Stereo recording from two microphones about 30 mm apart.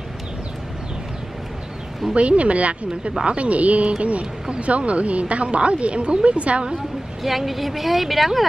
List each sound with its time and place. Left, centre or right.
2.1 s speech: right
7.2 s speech: centre